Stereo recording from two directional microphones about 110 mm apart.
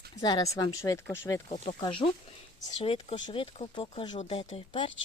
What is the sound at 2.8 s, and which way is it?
Speech, 55° left (ahead or behind).